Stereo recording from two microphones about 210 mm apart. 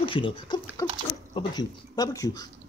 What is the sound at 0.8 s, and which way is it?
Dog, 10° left (ahead or behind).